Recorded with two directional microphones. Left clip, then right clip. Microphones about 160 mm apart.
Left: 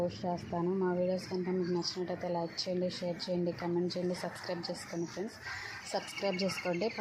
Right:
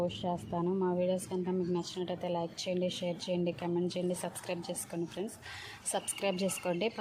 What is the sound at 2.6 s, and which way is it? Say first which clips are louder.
Speech: right 1 dB; 85° right.